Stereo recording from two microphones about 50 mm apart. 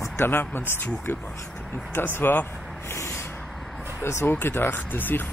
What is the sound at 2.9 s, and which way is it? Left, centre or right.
Vehicle, left.